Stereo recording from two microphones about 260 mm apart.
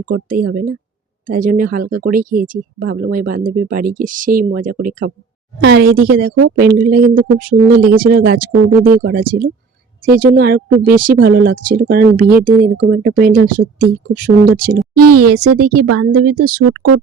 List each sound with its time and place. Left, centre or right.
0.0 s speech: right
14.9 s speech: right